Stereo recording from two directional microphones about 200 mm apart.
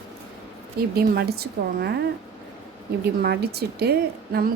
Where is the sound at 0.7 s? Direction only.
50° right (ahead or behind).